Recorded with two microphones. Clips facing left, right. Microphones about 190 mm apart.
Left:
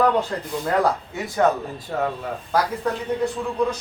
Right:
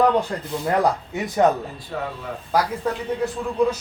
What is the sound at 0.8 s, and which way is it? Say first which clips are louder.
Speech: even; 20° right (ahead or behind).